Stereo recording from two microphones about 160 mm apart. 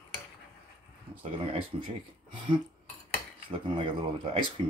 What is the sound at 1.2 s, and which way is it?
Speech, 35° right (ahead or behind).